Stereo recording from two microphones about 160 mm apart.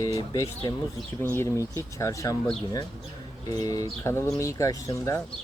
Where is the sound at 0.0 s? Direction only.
20° left (ahead or behind).